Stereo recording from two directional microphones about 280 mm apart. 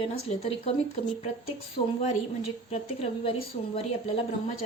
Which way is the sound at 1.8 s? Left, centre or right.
Left.